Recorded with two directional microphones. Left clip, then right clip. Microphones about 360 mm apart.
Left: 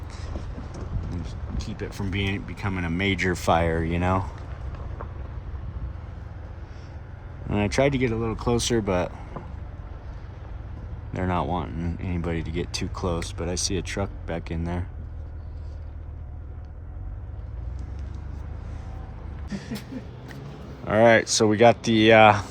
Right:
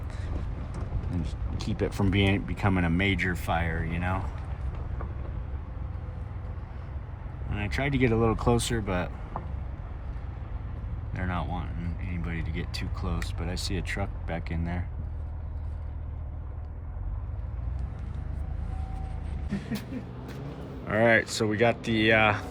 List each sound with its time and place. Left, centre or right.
1.2 s speech: centre
7.5 s speech: centre
11.1 s speech: centre
20.8 s speech: centre